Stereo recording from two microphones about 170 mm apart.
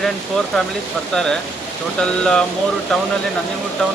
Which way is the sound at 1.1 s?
5° left (ahead or behind).